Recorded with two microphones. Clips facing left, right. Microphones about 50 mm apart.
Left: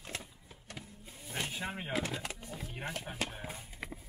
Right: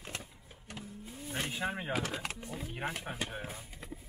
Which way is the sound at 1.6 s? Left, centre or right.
Right.